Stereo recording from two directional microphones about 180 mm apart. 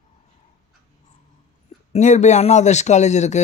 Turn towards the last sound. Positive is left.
turn(degrees=40)  # may be behind; listen again after turning